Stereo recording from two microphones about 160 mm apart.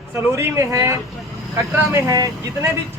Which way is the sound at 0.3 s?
20° right (ahead or behind).